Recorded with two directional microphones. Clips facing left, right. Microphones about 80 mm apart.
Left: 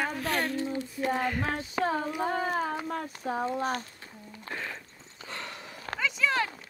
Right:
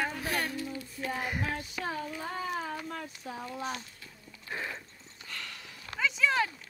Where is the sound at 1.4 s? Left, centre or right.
Left.